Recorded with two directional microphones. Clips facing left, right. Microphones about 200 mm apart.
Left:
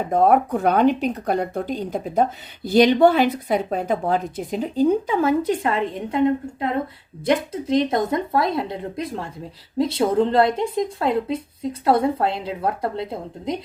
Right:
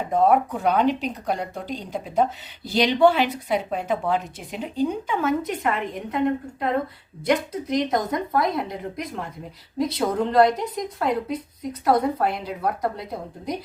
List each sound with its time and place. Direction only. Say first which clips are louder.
0.1 s a woman's voice: left 2 dB; 55° left (ahead or behind); by 13.6 s 25° left (ahead or behind)